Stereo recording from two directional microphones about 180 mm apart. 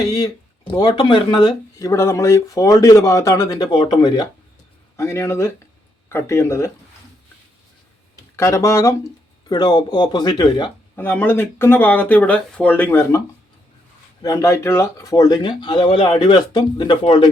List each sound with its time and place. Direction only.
0.0 s speech: 20° left (ahead or behind)
8.4 s speech: 15° left (ahead or behind)
10.9 s speech: 10° left (ahead or behind); by 17.2 s 30° left (ahead or behind)